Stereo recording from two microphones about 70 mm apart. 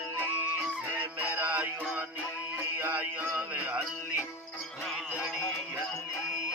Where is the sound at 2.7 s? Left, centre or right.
Right.